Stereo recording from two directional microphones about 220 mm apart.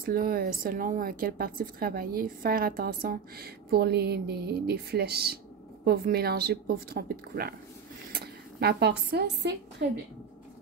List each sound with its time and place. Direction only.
0.0 s a woman's voice: 40° right (ahead or behind)